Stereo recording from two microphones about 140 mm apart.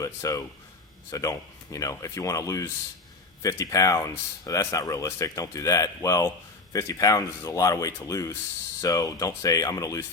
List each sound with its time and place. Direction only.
0.0 s speech: 25° left (ahead or behind)